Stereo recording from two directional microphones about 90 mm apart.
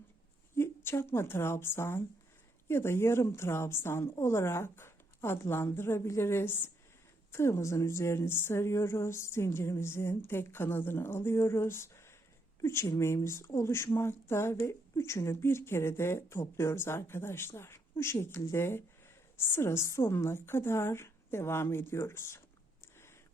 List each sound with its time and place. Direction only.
0.5 s speech: 25° left (ahead or behind)